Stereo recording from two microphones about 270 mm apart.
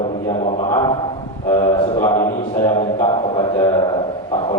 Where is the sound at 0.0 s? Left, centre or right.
Left.